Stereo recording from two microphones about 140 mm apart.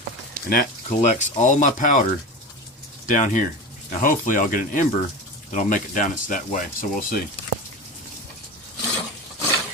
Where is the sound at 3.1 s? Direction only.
65° left (ahead or behind).